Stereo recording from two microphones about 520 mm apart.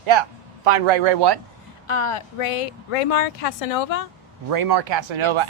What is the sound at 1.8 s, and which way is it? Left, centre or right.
Speech, left.